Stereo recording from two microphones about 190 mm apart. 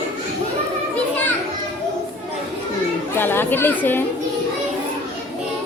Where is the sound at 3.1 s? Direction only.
10° left (ahead or behind).